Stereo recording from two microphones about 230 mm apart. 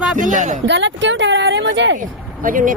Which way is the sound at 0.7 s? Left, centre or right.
Right.